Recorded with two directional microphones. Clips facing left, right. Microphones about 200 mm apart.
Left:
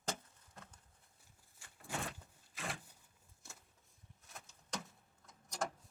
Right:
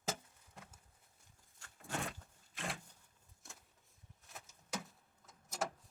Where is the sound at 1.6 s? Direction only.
10° left (ahead or behind).